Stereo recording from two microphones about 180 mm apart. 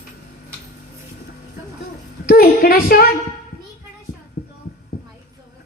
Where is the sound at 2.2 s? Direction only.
55° left (ahead or behind).